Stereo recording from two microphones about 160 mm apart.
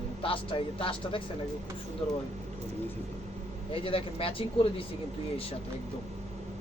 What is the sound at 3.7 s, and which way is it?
Speech, 35° left (ahead or behind).